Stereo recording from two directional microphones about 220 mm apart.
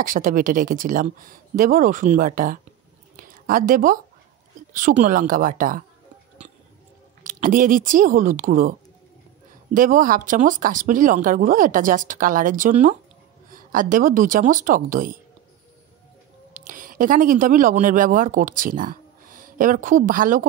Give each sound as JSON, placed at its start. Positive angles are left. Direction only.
{"t": 0.0, "sound": "speech", "side_deg": -40}
{"t": 3.2, "sound": "a sound", "side_deg": -40}
{"t": 4.7, "sound": "speech", "side_deg": -40}
{"t": 7.2, "sound": "speech", "side_deg": -35}
{"t": 9.8, "sound": "speech", "side_deg": -40}
{"t": 16.5, "sound": "speech", "side_deg": -40}